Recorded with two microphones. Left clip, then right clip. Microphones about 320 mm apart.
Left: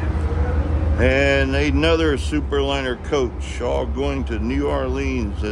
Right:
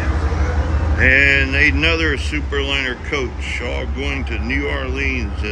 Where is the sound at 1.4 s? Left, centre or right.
Centre.